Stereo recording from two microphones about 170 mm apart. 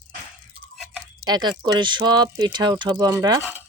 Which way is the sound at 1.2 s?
25° right (ahead or behind).